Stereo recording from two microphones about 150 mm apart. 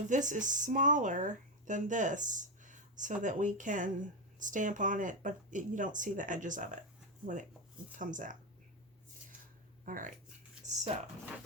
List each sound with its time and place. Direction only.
0.1 s speech: 55° right (ahead or behind)
7.9 s speech: 60° right (ahead or behind)
9.8 s speech: 65° right (ahead or behind)
10.6 s a sound: 50° right (ahead or behind)